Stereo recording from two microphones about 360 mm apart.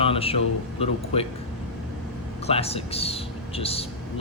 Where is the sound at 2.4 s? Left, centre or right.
Centre.